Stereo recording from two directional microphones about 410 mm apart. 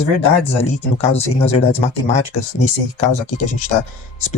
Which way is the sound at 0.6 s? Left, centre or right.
Centre.